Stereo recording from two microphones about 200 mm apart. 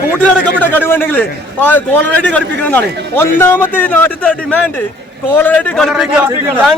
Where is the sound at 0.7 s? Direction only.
10° left (ahead or behind).